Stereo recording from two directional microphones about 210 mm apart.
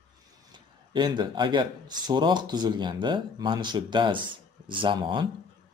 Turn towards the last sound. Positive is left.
turn(degrees=-20)  # may be behind; listen again after turning